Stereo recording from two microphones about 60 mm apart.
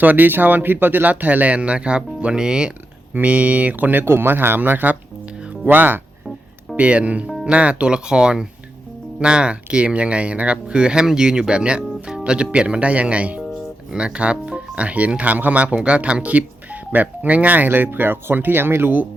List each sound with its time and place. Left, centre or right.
0.0 s speech: right
4.0 s speech: right
6.7 s speech: right